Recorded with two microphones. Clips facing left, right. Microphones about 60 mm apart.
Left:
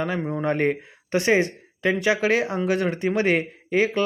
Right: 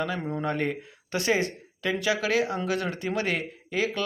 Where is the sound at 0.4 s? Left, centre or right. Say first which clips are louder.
Left 7 dB; left.